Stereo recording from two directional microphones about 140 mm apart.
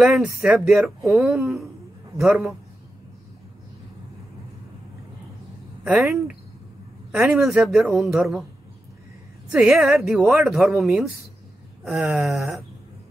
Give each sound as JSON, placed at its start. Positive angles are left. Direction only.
{"t": 0.0, "sound": "speech", "side_deg": -10}
{"t": 5.9, "sound": "speech", "side_deg": -5}
{"t": 9.5, "sound": "speech", "side_deg": -5}